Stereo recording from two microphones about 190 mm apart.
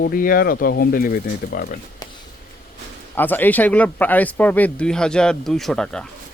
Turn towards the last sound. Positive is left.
turn(degrees=5)  # may be behind; listen again after turning